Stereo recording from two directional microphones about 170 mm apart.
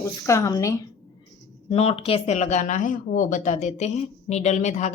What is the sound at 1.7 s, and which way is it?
Speech, 35° left (ahead or behind).